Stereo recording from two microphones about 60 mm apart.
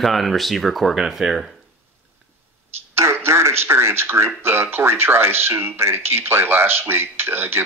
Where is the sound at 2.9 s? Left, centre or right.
Right.